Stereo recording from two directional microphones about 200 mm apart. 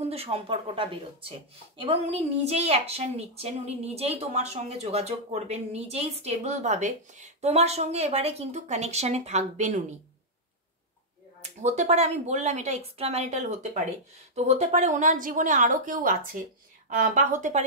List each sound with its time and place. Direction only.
0.0 s a woman's voice: 30° right (ahead or behind)
11.6 s a woman's voice: 35° right (ahead or behind)